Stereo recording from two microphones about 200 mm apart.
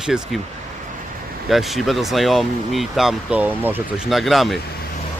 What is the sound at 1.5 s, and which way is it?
Speech, centre (ahead or behind).